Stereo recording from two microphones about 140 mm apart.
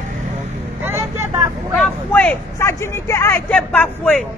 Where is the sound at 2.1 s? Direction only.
15° left (ahead or behind).